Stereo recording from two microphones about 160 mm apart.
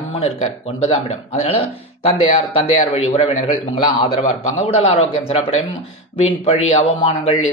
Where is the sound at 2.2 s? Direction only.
40° left (ahead or behind).